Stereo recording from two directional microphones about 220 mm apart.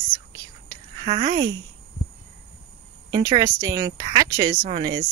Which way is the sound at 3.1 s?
15° right (ahead or behind).